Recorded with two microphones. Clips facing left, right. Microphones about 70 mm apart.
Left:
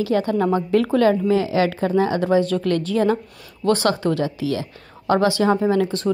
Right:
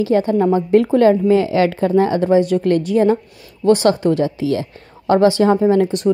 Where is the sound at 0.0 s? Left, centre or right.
Right.